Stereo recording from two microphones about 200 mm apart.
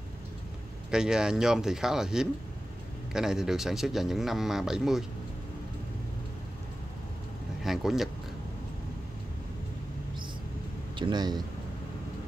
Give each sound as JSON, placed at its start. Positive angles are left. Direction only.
{"t": 0.8, "sound": "a man's voice", "side_deg": -5}
{"t": 7.6, "sound": "speech", "side_deg": 0}
{"t": 11.0, "sound": "speech", "side_deg": -20}